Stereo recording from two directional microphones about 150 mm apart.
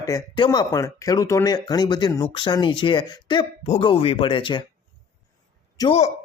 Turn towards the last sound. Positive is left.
turn(degrees=45)  # may be behind; listen again after turning